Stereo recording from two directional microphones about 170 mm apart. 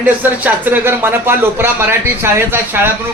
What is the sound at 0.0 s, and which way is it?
Speech, 10° right (ahead or behind).